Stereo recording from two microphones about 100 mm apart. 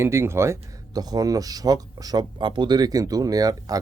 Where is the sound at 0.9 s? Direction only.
40° right (ahead or behind).